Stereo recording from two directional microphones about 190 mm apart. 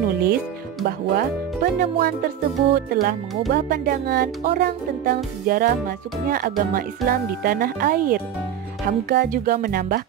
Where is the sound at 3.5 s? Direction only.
55° right (ahead or behind).